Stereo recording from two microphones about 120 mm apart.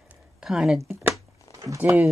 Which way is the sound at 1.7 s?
20° right (ahead or behind).